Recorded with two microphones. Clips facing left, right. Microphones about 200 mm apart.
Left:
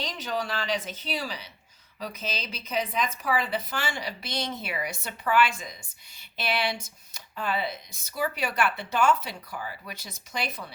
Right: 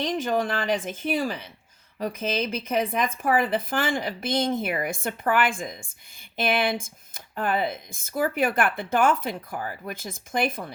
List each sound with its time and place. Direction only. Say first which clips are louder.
0.0 s speech: right 7 dB; 50° right (ahead or behind)